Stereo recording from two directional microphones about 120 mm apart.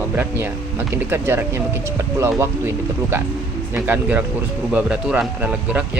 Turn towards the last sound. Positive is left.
turn(degrees=-10)  # may be behind; listen again after turning